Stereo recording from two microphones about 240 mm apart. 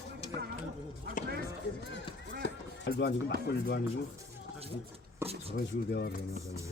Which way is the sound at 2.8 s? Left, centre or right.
Left.